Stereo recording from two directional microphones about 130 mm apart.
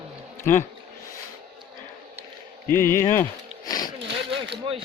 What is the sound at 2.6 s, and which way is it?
Speech, 20° left (ahead or behind).